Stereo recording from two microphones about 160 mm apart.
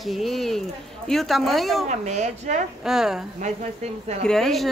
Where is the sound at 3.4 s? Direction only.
45° right (ahead or behind).